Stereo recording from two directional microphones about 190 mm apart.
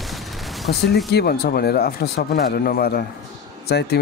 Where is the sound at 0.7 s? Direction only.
55° left (ahead or behind).